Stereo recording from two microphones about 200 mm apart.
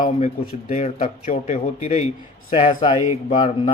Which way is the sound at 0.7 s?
40° left (ahead or behind).